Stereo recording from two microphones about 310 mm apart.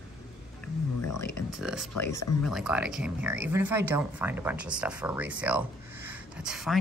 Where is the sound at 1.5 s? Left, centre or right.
Centre.